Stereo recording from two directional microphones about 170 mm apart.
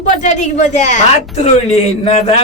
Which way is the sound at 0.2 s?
45° left (ahead or behind).